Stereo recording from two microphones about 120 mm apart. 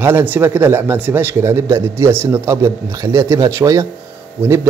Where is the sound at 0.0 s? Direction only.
15° right (ahead or behind).